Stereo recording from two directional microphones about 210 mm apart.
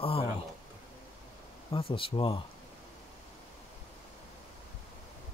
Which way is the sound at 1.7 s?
25° left (ahead or behind).